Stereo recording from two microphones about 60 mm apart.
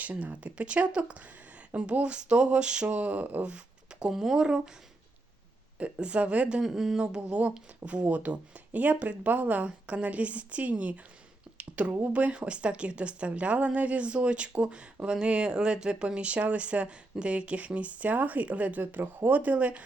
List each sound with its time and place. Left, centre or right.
0.0 s speech: right
4.0 s speech: centre
5.8 s speech: right
6.6 s speech: centre
7.2 s speech: right